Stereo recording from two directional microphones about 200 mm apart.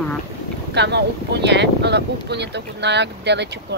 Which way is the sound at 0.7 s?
60° right (ahead or behind).